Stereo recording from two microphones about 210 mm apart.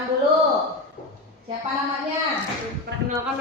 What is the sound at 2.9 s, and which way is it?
Speech, 45° right (ahead or behind).